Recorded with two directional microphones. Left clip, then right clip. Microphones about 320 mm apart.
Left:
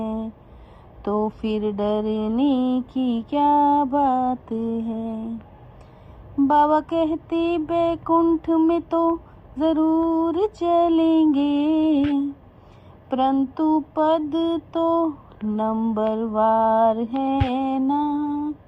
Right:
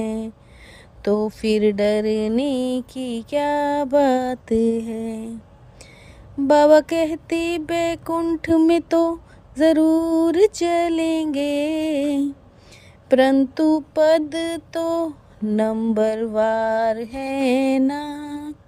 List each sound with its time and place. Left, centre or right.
0.0 s a sound: right
1.1 s music: right
6.5 s music: right